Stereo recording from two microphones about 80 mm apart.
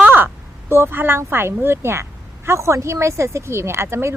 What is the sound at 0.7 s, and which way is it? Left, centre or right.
Speech, right.